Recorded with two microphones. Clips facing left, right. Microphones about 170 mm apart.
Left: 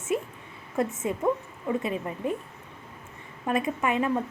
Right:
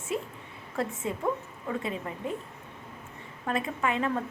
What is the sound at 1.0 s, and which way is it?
A woman's voice, 15° left (ahead or behind).